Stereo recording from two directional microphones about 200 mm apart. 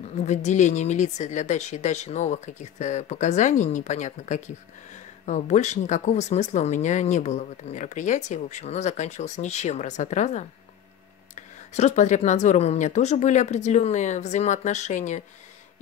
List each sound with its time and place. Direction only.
0.2 s speech: 35° left (ahead or behind)